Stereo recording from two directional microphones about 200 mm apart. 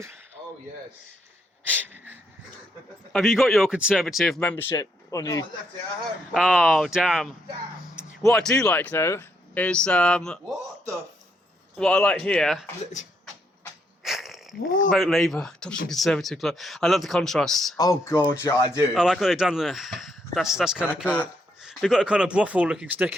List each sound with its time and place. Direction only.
1.7 s a sound: 10° right (ahead or behind)
3.1 s speech: centre (ahead or behind); by 5.5 s 15° left (ahead or behind)
6.3 s speech: 5° right (ahead or behind)
14.0 s a sound: centre (ahead or behind)
14.8 s speech: centre (ahead or behind)
17.7 s speech: 15° left (ahead or behind)
18.9 s speech: centre (ahead or behind)
21.0 s a sound: 5° left (ahead or behind)
21.7 s speech: 5° right (ahead or behind)